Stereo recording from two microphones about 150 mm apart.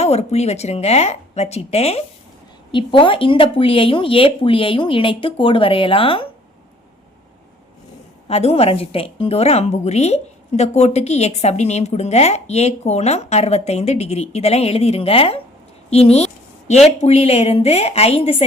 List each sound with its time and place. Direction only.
0.0 s a woman's voice: 45° left (ahead or behind)
8.3 s a woman's voice: 45° left (ahead or behind)